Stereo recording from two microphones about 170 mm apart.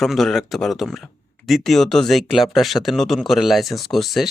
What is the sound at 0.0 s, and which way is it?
Speech, centre (ahead or behind).